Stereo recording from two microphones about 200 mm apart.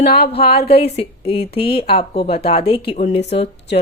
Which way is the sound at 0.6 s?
30° left (ahead or behind).